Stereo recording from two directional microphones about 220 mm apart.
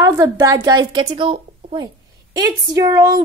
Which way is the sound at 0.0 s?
15° right (ahead or behind).